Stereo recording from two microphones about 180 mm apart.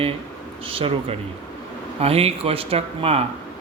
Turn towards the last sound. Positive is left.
turn(degrees=-30)  # may be behind; listen again after turning